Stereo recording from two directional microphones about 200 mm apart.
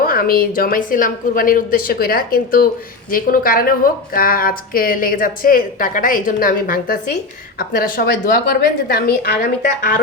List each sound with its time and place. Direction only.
0.0 s a woman's voice: 45° left (ahead or behind)